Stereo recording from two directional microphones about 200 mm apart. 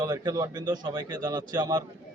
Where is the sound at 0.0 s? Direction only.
20° right (ahead or behind).